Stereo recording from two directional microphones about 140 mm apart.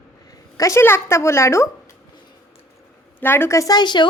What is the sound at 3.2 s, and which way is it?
Speech, 15° left (ahead or behind).